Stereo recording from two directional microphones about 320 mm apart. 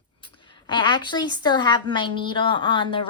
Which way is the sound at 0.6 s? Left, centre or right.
Centre.